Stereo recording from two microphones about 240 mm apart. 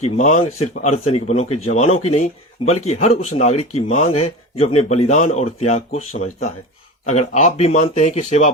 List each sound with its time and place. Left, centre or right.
0.0 s speech: left